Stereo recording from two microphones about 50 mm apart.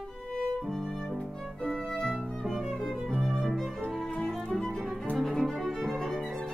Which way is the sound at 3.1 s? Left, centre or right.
Centre.